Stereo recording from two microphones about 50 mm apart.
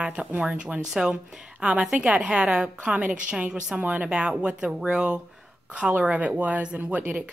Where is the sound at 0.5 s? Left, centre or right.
Right.